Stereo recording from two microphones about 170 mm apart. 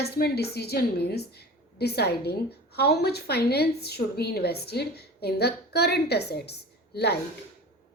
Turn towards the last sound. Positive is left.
turn(degrees=70)  # may be behind; listen again after turning